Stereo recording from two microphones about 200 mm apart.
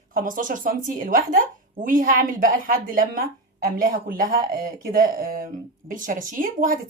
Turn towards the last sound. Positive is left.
turn(degrees=-45)  # may be behind; listen again after turning